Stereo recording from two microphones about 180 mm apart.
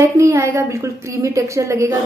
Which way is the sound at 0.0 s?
15° right (ahead or behind).